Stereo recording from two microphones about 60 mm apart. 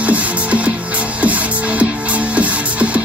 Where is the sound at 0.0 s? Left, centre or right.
Right.